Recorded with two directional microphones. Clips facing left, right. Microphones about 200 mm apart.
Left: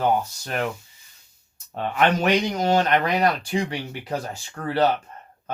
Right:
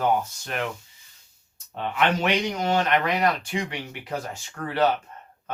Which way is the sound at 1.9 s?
40° left (ahead or behind).